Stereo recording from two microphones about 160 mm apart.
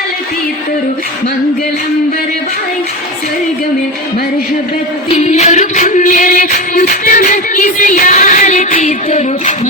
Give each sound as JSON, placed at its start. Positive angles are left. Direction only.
{"t": 5.1, "sound": "music", "side_deg": 45}